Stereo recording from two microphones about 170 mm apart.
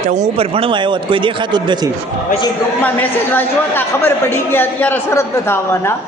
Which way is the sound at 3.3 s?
10° left (ahead or behind).